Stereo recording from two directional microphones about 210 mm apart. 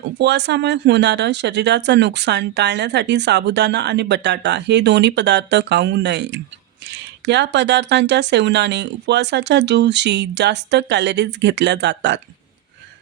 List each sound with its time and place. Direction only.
0.2 s speech: 55° right (ahead or behind)